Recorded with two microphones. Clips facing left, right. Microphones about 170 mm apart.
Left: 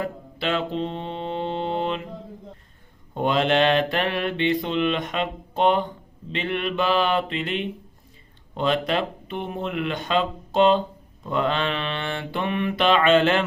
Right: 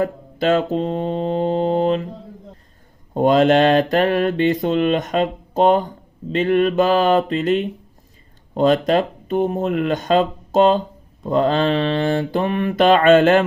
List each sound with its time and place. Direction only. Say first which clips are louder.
0.0 s mantra: right 8 dB; 45° right (ahead or behind)
3.2 s mantra: right 7 dB; 40° right (ahead or behind)
6.3 s speech: right 10 dB; 40° right (ahead or behind)
11.3 s mantra: right 7 dB; 35° right (ahead or behind)